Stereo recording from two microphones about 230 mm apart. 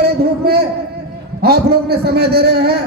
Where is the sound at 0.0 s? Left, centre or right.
Right.